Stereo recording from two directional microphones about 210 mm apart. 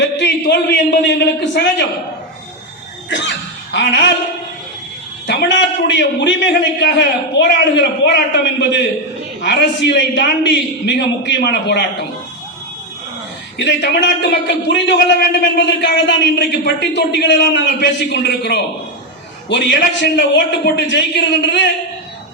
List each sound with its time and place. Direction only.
0.0 s a man's voice: 55° left (ahead or behind)
3.1 s speech: 60° left (ahead or behind)
5.2 s a man's voice: 55° left (ahead or behind)
13.7 s a man's voice: 55° left (ahead or behind)